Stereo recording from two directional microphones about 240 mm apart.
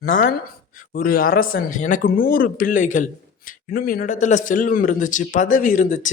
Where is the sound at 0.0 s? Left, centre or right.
Left.